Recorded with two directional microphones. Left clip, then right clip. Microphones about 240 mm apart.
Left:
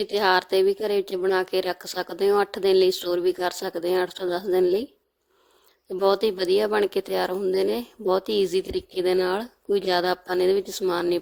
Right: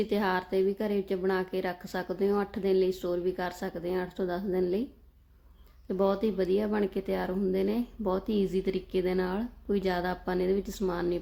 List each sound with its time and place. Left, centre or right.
0.0 s speech: left
6.0 s speech: left